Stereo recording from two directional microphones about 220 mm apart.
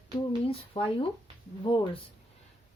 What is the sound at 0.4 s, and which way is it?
Speech, 25° left (ahead or behind).